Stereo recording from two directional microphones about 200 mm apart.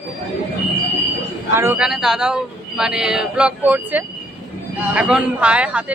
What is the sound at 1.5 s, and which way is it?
A man's voice, 10° right (ahead or behind).